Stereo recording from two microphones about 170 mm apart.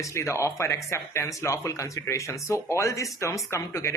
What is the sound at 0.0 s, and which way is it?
Speech, 15° left (ahead or behind).